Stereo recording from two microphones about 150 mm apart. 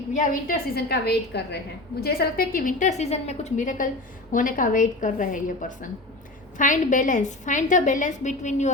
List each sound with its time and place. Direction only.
0.1 s a woman's voice: 60° left (ahead or behind)